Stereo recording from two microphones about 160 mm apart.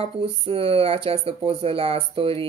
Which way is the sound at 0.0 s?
35° right (ahead or behind).